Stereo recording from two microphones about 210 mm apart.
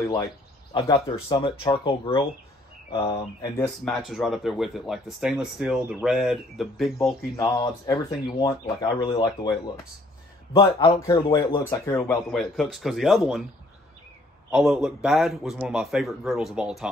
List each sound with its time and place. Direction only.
0.0 s speech: 15° left (ahead or behind)
0.7 s speech: 25° left (ahead or behind)
3.8 s a man's voice: centre (ahead or behind)
7.3 s speech: 15° left (ahead or behind)
12.1 s a man's voice: centre (ahead or behind)
14.5 s a man's voice: centre (ahead or behind)